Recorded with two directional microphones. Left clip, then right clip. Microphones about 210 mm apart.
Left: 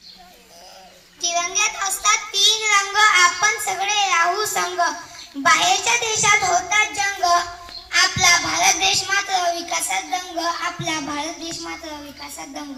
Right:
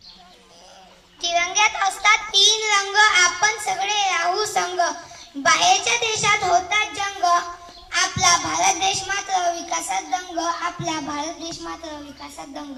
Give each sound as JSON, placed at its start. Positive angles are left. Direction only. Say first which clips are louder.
{"t": 1.2, "sound": "child singing", "louder": "right 2 dB", "side_deg": 55}
{"t": 5.4, "sound": "a child's voice", "louder": "even", "side_deg": 50}
{"t": 11.6, "sound": "a woman's voice", "louder": "left 1 dB", "side_deg": 10}